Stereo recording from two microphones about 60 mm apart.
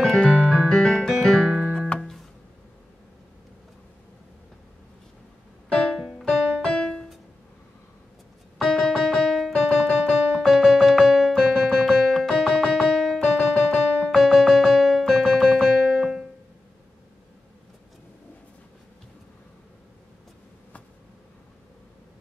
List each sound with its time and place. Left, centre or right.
0.0 s keyboard: centre
0.7 s keyboard: centre
1.5 s music: centre
6.0 s music: centre
6.7 s music: centre
8.5 s keyboard: centre
10.5 s music: centre
11.3 s keyboard: centre